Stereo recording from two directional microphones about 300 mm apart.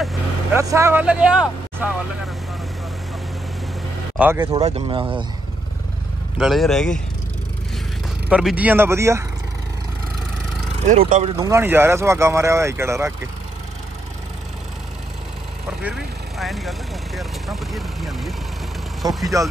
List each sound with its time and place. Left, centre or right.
0.0 s speech: centre
4.2 s speech: centre
4.6 s speech: right
6.3 s speech: centre
8.3 s speech: centre
10.9 s speech: right
11.3 s speech: centre
15.8 s speech: centre
19.0 s speech: centre